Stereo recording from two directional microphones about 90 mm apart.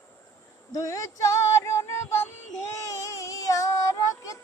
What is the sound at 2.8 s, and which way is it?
Child singing, 35° left (ahead or behind).